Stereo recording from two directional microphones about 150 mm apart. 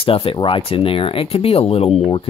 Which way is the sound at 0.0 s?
40° left (ahead or behind).